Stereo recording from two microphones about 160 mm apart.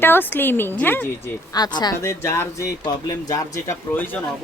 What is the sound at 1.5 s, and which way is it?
Speech, 25° left (ahead or behind).